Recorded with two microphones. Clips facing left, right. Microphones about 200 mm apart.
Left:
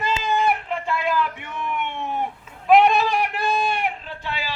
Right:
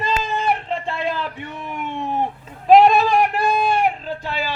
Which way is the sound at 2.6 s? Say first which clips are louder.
Right 4 dB; 35° right (ahead or behind).